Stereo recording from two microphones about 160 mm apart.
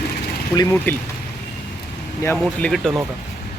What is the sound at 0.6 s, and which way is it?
Speech, 20° left (ahead or behind).